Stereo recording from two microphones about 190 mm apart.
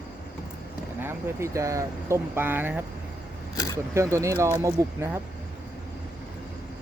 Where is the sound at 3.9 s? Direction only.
15° right (ahead or behind).